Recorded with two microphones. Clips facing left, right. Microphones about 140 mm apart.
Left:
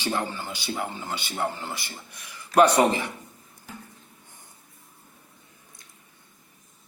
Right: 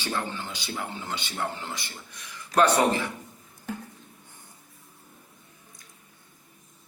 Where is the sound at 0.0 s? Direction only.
15° left (ahead or behind).